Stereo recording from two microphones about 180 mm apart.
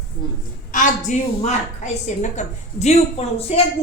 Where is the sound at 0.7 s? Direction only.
45° left (ahead or behind).